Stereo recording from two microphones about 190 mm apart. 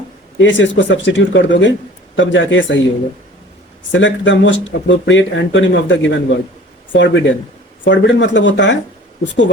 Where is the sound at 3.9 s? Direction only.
75° left (ahead or behind).